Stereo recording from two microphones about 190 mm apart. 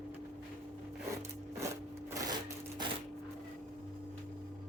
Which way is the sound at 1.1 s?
15° right (ahead or behind).